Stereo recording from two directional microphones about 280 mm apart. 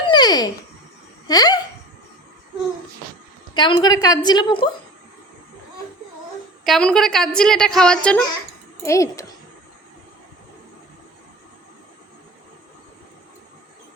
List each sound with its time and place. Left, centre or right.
0.1 s a sound: centre
1.3 s a woman's voice: centre
3.5 s a woman's voice: centre
6.7 s a woman's voice: centre